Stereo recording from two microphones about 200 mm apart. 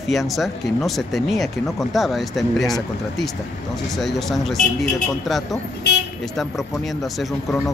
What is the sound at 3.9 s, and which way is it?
Speech, centre (ahead or behind).